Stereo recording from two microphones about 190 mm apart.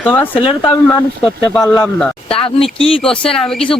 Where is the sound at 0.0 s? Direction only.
10° left (ahead or behind).